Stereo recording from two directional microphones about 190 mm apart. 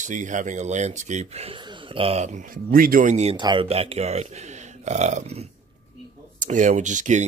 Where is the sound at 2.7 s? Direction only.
50° right (ahead or behind).